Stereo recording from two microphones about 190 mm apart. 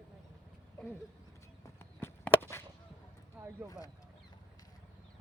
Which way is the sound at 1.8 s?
10° left (ahead or behind).